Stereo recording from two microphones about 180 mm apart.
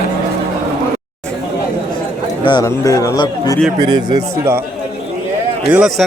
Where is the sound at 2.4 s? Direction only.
20° left (ahead or behind).